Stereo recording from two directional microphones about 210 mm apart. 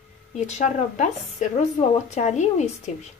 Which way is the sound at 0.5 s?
35° left (ahead or behind).